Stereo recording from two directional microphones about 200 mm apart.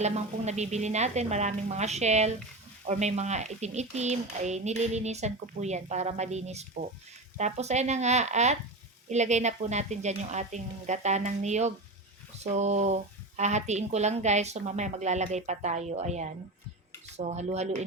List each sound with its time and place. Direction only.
0.0 s speech: 35° right (ahead or behind)